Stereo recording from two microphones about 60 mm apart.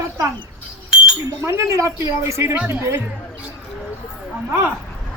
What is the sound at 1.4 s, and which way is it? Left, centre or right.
A woman's voice, right.